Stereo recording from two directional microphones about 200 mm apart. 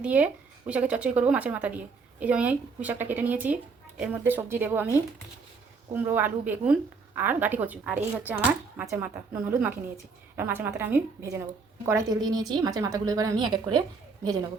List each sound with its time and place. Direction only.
0.0 s a woman's voice: 5° right (ahead or behind)